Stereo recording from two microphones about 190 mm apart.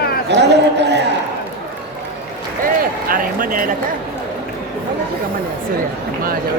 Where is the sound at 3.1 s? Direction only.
45° right (ahead or behind).